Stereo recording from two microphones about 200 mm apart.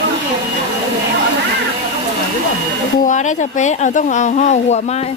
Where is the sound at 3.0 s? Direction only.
40° left (ahead or behind).